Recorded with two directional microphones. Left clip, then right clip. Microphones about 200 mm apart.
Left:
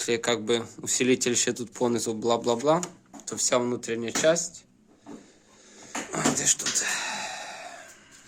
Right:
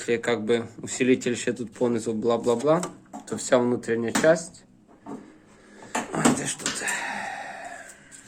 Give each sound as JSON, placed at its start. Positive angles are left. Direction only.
{"t": 0.0, "sound": "speech", "side_deg": 25}
{"t": 2.8, "sound": "speech", "side_deg": 10}
{"t": 6.1, "sound": "dog", "side_deg": 15}